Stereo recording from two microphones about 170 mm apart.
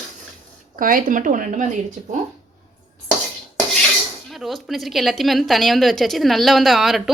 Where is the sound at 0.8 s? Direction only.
55° right (ahead or behind).